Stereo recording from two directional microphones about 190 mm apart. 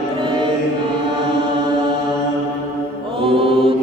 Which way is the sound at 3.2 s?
30° right (ahead or behind).